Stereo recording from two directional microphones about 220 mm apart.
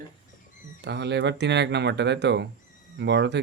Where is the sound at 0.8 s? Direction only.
50° right (ahead or behind).